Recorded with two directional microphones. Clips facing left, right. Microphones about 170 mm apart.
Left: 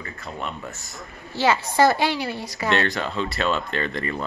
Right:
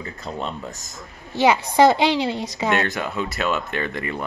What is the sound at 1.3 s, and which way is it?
A woman's voice, 15° right (ahead or behind).